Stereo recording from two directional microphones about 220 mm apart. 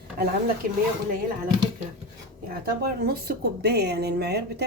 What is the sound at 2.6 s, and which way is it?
Speech, 45° right (ahead or behind).